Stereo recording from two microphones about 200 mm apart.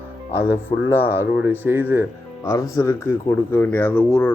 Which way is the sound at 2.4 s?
15° left (ahead or behind).